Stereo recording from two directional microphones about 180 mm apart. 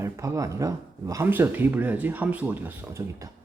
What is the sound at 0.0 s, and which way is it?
Speech, 15° right (ahead or behind).